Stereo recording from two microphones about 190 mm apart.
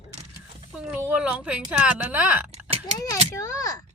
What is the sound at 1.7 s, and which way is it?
Speech, 5° right (ahead or behind).